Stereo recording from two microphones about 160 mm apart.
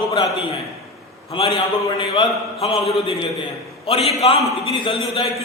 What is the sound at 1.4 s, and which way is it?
A man's voice, 35° left (ahead or behind).